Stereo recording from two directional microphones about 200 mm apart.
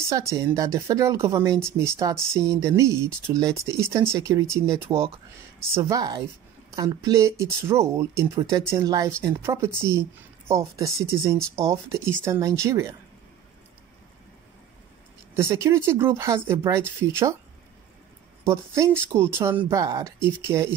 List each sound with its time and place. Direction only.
0.1 s a woman's voice: 15° right (ahead or behind)
15.3 s speech: 15° right (ahead or behind)
18.4 s speech: 15° right (ahead or behind)